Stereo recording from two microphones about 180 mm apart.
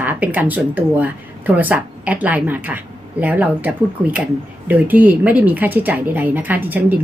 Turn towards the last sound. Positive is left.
turn(degrees=-10)  # may be behind; listen again after turning